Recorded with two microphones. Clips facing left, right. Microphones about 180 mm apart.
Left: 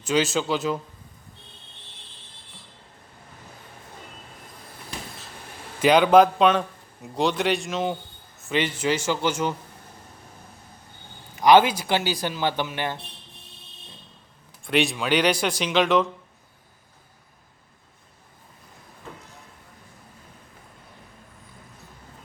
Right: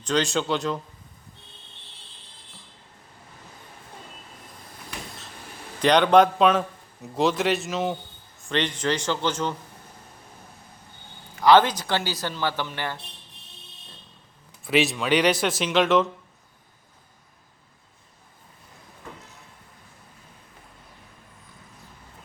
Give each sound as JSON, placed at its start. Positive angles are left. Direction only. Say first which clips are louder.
{"t": 0.0, "sound": "a man's voice", "louder": "left 1 dB", "side_deg": 5}
{"t": 5.8, "sound": "a man's voice", "louder": "left 1 dB", "side_deg": 5}
{"t": 11.3, "sound": "speech", "louder": "left 1 dB", "side_deg": 15}
{"t": 14.6, "sound": "a man's voice", "louder": "right 1 dB", "side_deg": 0}